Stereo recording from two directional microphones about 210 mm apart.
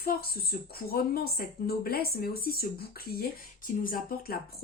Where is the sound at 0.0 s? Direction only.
45° left (ahead or behind).